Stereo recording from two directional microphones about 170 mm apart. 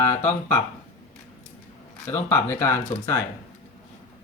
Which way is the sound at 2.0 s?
10° left (ahead or behind).